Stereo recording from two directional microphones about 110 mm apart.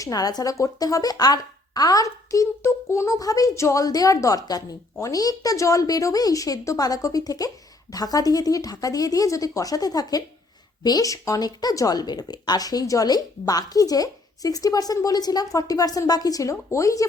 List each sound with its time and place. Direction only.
0.0 s a woman's voice: 35° left (ahead or behind)